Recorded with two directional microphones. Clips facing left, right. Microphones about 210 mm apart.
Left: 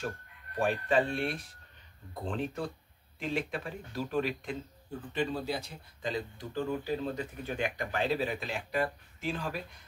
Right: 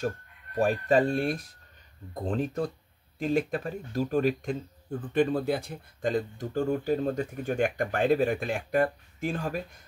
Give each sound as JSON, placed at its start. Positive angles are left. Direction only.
{"t": 0.6, "sound": "speech", "side_deg": -40}